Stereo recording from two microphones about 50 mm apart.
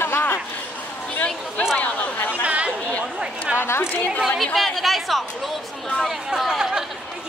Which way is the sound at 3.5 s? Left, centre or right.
Left.